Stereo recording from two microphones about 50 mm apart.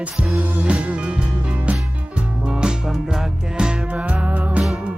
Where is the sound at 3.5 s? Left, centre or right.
Centre.